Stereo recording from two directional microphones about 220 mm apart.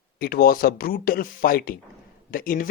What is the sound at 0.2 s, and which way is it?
Speech, 40° left (ahead or behind).